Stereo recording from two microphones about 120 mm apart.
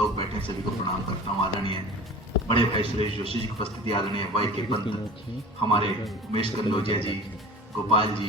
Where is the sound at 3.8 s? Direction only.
45° left (ahead or behind).